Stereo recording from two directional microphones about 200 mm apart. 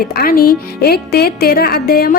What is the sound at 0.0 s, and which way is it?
A woman's voice, 50° left (ahead or behind).